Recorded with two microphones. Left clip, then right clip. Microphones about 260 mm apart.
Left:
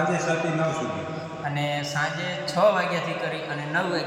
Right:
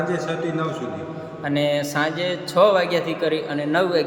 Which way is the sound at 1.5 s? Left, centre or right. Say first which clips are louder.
Right 8 dB; right.